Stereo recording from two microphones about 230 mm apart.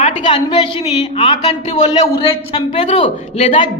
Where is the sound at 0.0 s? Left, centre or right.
Left.